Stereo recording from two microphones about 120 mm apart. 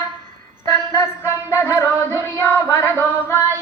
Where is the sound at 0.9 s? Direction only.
20° left (ahead or behind).